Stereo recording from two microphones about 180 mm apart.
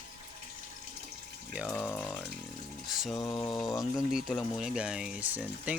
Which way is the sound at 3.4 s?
Centre (ahead or behind).